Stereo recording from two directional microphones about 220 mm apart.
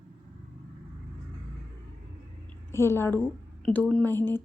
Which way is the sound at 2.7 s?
10° left (ahead or behind).